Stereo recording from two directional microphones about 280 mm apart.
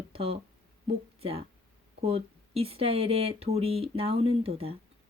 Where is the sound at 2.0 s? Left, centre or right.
Right.